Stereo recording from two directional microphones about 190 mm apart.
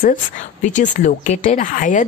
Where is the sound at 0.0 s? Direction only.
40° left (ahead or behind).